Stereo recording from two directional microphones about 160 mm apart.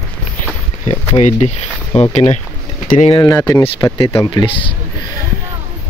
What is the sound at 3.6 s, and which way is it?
Speech, 35° left (ahead or behind).